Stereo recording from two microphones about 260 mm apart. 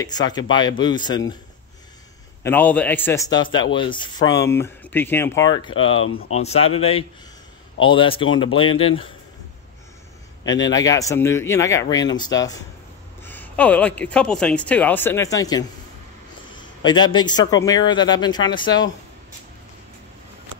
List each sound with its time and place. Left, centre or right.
0.0 s speech: centre
2.4 s speech: centre
10.4 s speech: centre